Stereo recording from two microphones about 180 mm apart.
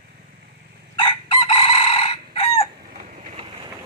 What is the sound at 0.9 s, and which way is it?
Chicken, 25° left (ahead or behind).